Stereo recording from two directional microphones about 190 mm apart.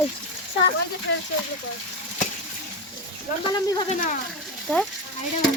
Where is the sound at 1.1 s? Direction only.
65° left (ahead or behind).